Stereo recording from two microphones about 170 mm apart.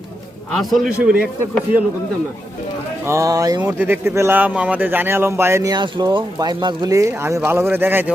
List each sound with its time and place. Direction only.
0.5 s a man's voice: centre (ahead or behind)
3.1 s speech: 20° right (ahead or behind)